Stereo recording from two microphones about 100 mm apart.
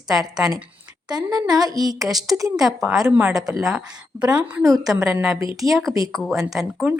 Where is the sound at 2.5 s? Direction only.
5° right (ahead or behind).